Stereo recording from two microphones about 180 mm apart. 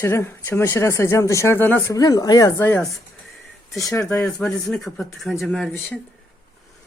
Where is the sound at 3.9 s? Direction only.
15° left (ahead or behind).